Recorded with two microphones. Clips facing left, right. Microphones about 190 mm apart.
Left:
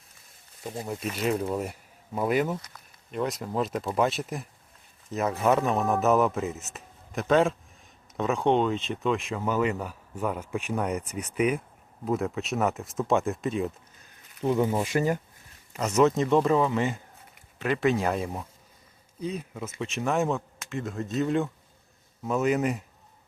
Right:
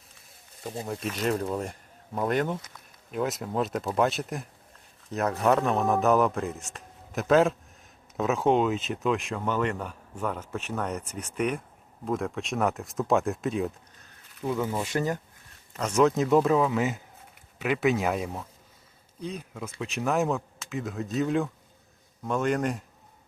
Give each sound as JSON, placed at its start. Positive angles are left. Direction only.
{"t": 0.9, "sound": "speech", "side_deg": 5}
{"t": 14.4, "sound": "speech", "side_deg": 20}